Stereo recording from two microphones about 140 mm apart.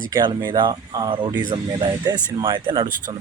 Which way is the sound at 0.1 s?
30° right (ahead or behind).